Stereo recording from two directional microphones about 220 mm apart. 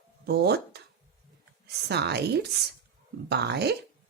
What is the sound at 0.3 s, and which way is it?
Speech, 50° right (ahead or behind).